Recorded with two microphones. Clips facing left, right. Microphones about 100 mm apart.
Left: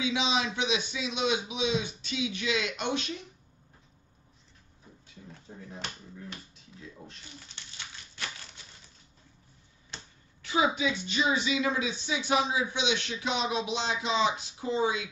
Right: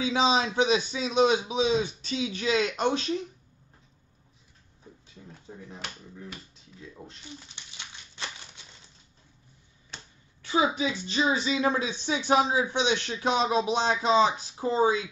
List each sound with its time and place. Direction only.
0.0 s speech: 40° right (ahead or behind)
7.1 s a sound: 20° right (ahead or behind)
10.4 s speech: 30° right (ahead or behind)